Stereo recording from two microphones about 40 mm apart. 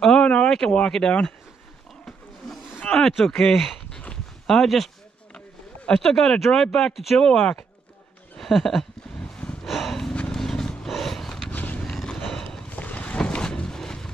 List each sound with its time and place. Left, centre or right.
0.0 s a sound: centre
0.6 s speech: left
2.9 s speech: left
3.3 s speech: centre
5.9 s speech: centre
6.9 s speech: centre
7.2 s speech: centre
8.4 s a sound: centre
10.9 s wild animals: centre
11.5 s roaring cats: left
11.8 s horse: centre
12.3 s a sound: centre
12.6 s vehicle: left
13.2 s a sound: left